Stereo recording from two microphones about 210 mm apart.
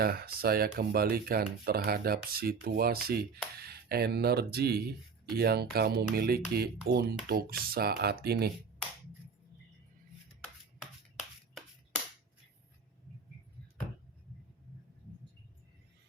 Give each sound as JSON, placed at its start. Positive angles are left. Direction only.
{"t": 0.0, "sound": "speech", "side_deg": -45}